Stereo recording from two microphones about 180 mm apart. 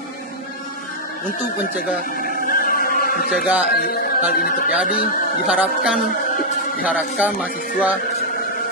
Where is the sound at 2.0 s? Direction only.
55° left (ahead or behind).